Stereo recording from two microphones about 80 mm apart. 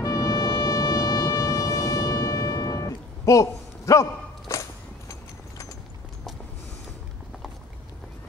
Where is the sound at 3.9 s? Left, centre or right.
Left.